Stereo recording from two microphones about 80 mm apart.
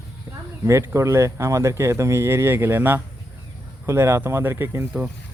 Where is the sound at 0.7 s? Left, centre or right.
Right.